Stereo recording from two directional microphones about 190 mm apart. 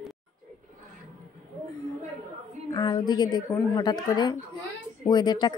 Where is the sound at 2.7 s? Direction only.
25° left (ahead or behind).